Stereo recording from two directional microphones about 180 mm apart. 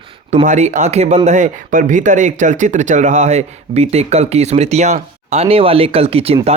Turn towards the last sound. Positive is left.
turn(degrees=-35)  # may be behind; listen again after turning